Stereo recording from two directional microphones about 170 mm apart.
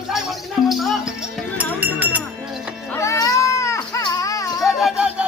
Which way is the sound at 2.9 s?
15° left (ahead or behind).